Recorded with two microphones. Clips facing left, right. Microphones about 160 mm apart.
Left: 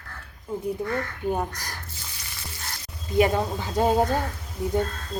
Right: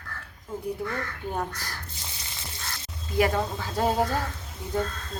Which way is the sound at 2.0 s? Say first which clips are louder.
Even; 25° right (ahead or behind).